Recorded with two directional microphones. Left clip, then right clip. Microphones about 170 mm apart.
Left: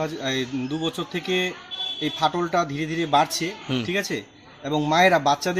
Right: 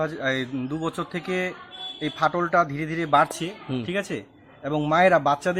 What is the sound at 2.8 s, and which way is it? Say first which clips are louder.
Speech: left 2 dB; 60° right (ahead or behind).